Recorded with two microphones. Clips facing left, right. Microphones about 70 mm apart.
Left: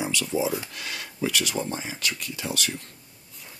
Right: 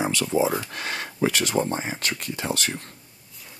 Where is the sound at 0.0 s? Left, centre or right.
Right.